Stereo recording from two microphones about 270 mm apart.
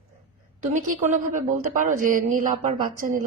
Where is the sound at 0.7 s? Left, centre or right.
Right.